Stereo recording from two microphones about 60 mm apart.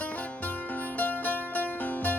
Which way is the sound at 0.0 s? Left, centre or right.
Left.